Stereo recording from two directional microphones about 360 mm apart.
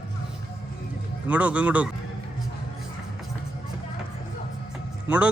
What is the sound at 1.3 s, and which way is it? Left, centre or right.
Speech, centre.